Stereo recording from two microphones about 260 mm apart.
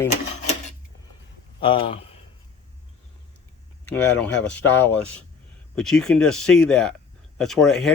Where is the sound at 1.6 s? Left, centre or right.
Centre.